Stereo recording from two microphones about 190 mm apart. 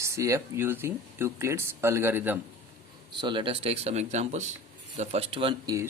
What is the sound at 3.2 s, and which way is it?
Speech, 25° right (ahead or behind).